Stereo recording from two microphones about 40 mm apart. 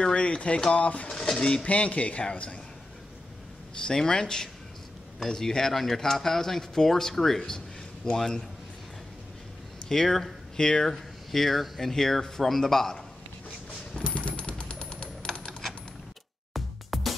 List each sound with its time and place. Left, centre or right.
0.0 s speech: left
1.7 s a man's voice: left
3.8 s speech: centre
9.8 s speech: centre
10.6 s speech: centre
11.3 s speech: centre
14.0 s a sound: left
16.5 s music: centre